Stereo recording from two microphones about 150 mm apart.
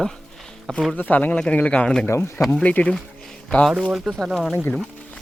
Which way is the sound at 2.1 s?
15° left (ahead or behind).